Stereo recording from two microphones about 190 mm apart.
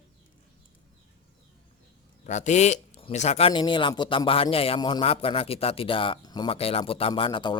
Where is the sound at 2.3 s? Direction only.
40° left (ahead or behind).